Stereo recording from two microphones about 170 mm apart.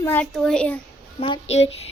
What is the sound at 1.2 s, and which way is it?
Speech, 35° left (ahead or behind).